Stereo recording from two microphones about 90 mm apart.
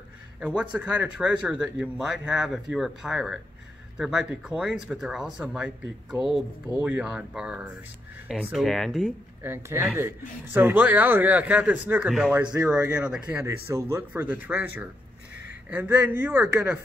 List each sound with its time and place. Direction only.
0.4 s speech: 15° right (ahead or behind)
6.7 s speech: 15° right (ahead or behind)
8.5 s speech: 5° left (ahead or behind)
9.4 s a man's voice: 25° right (ahead or behind)
14.2 s a man's voice: 20° right (ahead or behind)